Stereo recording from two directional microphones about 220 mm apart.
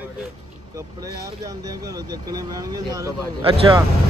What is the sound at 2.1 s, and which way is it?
Speech, 15° right (ahead or behind).